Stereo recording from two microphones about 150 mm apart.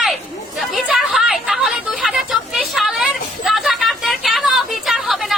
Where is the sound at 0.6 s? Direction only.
Centre (ahead or behind).